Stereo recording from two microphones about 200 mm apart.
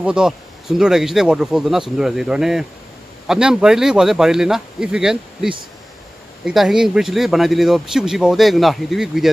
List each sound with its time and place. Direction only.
0.0 s speech: 5° right (ahead or behind)